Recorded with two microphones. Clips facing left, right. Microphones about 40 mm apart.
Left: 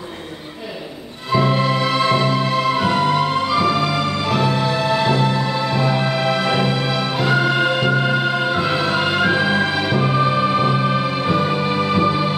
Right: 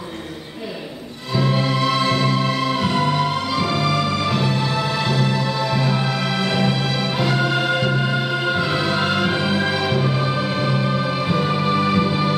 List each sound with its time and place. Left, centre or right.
1.3 s music: centre
9.9 s music: centre